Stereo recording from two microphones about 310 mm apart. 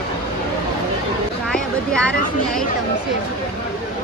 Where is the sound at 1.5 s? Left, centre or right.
Centre.